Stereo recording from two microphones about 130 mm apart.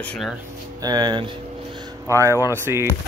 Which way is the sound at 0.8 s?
30° right (ahead or behind).